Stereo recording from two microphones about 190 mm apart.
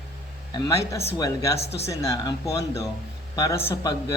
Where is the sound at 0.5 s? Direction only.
30° left (ahead or behind).